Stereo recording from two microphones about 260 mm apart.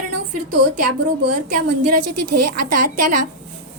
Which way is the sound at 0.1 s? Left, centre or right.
Right.